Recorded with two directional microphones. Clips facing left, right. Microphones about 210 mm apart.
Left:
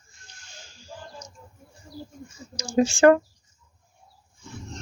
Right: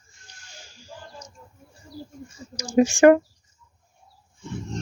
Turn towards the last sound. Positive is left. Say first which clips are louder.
# right 2 dB
turn(degrees=-15)  # may be behind; listen again after turning